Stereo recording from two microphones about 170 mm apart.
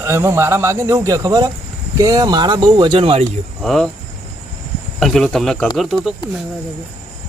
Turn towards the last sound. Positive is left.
turn(degrees=0)  # may be behind; listen again after turning